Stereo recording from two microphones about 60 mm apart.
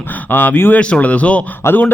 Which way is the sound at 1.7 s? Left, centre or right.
Left.